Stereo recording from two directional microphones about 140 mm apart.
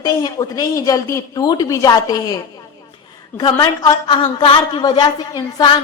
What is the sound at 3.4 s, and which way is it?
A woman's voice, 30° left (ahead or behind).